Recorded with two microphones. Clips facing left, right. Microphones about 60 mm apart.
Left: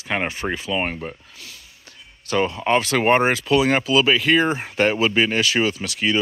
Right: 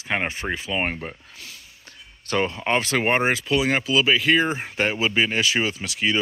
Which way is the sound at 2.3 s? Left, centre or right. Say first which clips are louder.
Left 2 dB; right.